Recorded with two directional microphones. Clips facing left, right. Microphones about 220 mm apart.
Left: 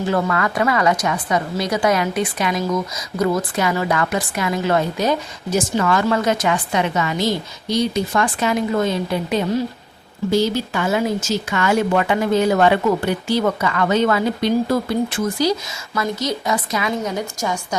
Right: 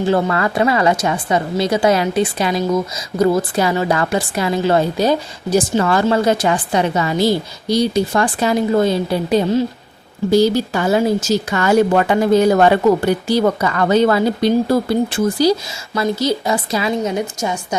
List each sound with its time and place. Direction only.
0.0 s a woman's voice: 30° right (ahead or behind)